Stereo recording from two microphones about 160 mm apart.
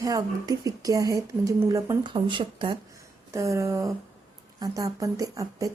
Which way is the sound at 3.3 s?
20° right (ahead or behind).